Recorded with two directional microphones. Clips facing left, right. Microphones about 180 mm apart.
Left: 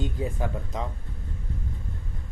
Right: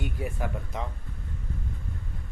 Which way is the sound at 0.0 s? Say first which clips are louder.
Left 3 dB; 20° left (ahead or behind).